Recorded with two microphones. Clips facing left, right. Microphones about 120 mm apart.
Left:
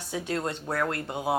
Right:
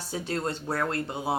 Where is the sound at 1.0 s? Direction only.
15° left (ahead or behind).